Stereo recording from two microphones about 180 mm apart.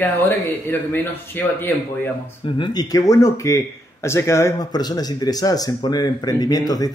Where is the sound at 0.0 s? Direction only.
10° left (ahead or behind).